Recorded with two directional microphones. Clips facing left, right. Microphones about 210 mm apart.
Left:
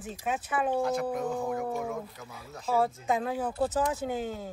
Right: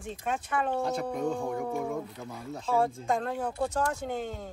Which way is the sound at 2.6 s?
5° left (ahead or behind).